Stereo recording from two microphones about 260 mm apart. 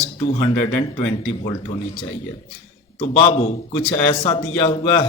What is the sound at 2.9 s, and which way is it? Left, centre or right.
Speech, left.